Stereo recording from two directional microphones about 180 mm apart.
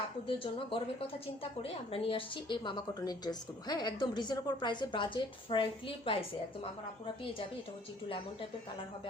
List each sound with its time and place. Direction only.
0.3 s a woman's voice: 30° left (ahead or behind)